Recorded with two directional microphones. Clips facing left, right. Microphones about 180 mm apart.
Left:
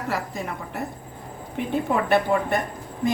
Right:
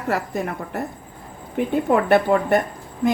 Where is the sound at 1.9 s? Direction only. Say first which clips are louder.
Right 4 dB; 50° right (ahead or behind).